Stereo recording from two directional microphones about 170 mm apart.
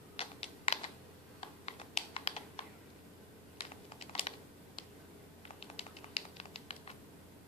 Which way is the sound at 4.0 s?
35° left (ahead or behind).